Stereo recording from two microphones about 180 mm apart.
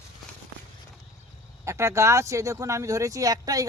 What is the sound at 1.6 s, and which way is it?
Speech, 15° right (ahead or behind).